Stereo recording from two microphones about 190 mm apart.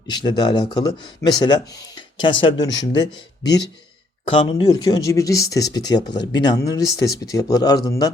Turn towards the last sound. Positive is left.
turn(degrees=20)  # may be behind; listen again after turning